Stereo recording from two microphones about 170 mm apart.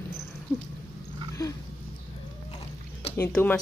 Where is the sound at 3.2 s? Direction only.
10° left (ahead or behind).